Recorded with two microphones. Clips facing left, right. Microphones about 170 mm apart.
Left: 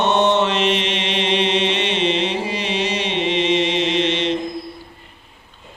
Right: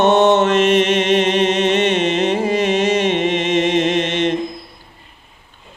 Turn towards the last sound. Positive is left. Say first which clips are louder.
# right 2 dB
turn(degrees=-50)  # may be behind; listen again after turning